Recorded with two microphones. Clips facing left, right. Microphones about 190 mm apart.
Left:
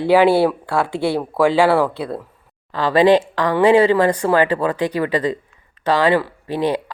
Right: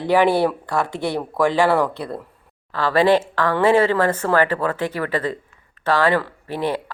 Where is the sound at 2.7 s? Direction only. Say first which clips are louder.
Left 3 dB; 15° left (ahead or behind).